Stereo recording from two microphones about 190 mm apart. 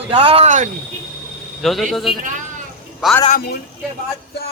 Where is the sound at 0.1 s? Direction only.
30° right (ahead or behind).